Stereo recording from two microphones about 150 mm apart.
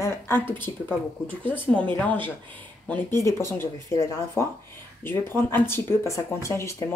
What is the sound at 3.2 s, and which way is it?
Speech, 20° left (ahead or behind).